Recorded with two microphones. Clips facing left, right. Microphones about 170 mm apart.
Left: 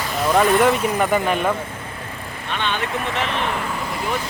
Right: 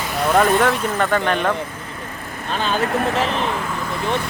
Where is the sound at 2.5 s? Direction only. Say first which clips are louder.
Right 4 dB; 35° right (ahead or behind).